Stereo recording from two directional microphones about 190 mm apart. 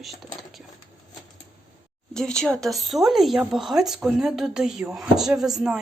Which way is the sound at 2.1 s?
5° left (ahead or behind).